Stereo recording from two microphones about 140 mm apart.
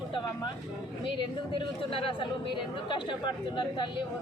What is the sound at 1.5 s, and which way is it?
Speech, 40° left (ahead or behind).